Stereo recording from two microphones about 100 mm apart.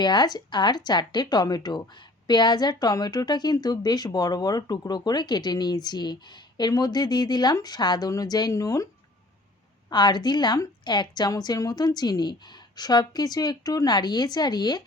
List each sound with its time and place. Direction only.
0.0 s a woman's voice: 45° left (ahead or behind)
9.9 s a woman's voice: 45° left (ahead or behind)